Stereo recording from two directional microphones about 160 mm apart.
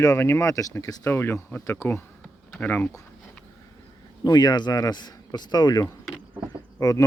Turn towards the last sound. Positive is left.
turn(degrees=20)  # may be behind; listen again after turning